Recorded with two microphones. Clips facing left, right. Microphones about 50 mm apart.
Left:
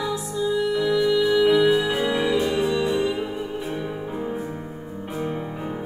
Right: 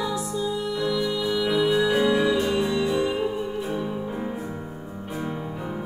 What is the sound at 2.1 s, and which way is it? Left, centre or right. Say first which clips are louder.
Music: even; left.